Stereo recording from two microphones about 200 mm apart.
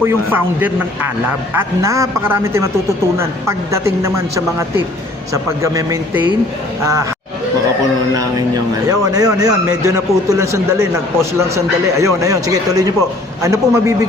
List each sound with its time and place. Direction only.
0.0 s a man's voice: 10° right (ahead or behind)
3.7 s a man's voice: 15° right (ahead or behind)
8.7 s a man's voice: 15° right (ahead or behind)